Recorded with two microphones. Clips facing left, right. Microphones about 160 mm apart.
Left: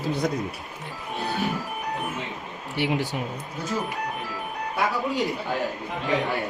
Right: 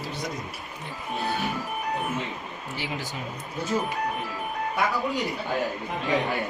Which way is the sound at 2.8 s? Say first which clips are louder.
Left 9 dB; 65° left (ahead or behind).